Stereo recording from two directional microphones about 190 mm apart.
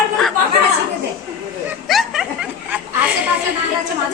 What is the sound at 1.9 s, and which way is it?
Snicker, centre (ahead or behind).